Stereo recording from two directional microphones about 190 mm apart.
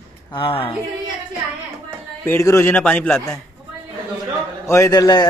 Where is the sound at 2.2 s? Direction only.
15° left (ahead or behind).